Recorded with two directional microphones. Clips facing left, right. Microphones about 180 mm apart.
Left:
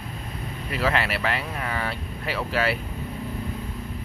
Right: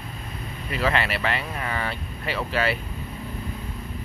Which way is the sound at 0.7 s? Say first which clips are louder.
Even; 5° left (ahead or behind).